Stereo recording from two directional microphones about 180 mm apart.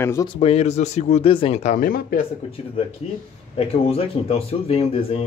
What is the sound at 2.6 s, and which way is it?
Speech, 35° left (ahead or behind).